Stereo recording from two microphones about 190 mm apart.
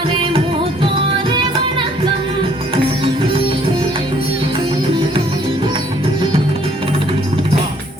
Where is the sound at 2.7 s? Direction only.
30° right (ahead or behind).